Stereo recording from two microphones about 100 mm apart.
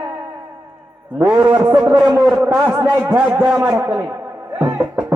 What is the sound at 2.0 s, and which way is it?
A man's voice, 10° right (ahead or behind).